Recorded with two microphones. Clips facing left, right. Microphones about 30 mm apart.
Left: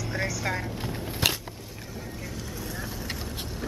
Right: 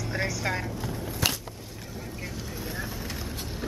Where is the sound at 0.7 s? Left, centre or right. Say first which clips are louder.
Even; left.